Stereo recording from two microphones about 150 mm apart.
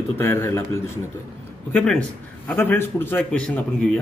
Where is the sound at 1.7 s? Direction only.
5° left (ahead or behind).